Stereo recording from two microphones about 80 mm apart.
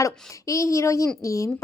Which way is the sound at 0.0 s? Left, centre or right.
Left.